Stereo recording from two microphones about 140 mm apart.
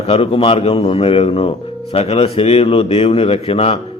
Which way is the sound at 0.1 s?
45° left (ahead or behind).